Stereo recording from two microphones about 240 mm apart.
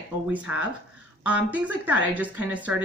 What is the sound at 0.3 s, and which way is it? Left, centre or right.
Speech, centre.